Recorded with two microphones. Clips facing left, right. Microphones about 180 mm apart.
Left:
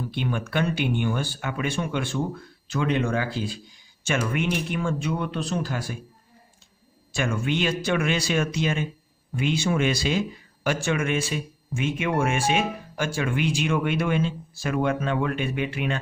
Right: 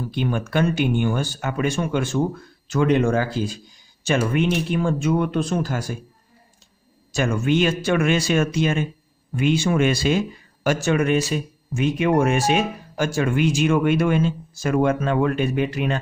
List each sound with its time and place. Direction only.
0.1 s a man's voice: 40° right (ahead or behind)
7.1 s a man's voice: 40° right (ahead or behind)